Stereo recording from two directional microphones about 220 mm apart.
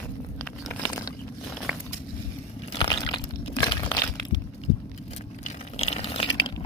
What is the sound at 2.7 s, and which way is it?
Crumpling, 20° left (ahead or behind).